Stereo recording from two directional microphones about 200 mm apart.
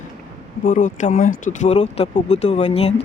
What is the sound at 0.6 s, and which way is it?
Speech, 40° left (ahead or behind).